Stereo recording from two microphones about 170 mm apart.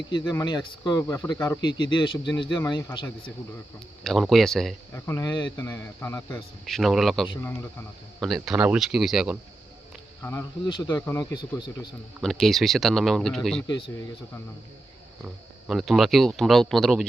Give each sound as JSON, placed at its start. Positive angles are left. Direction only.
{"t": 0.1, "sound": "speech", "side_deg": 25}
{"t": 4.0, "sound": "speech", "side_deg": 0}
{"t": 4.9, "sound": "speech", "side_deg": 15}
{"t": 5.5, "sound": "a man's voice", "side_deg": 15}
{"t": 6.7, "sound": "speech", "side_deg": 0}
{"t": 10.7, "sound": "speech", "side_deg": 25}
{"t": 12.2, "sound": "speech", "side_deg": 0}
{"t": 15.2, "sound": "speech", "side_deg": -5}